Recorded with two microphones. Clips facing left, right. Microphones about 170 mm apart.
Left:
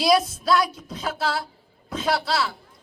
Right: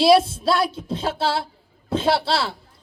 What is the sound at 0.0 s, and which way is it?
A man's voice, 30° right (ahead or behind).